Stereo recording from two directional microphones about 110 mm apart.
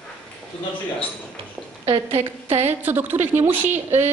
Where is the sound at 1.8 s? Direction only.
60° right (ahead or behind).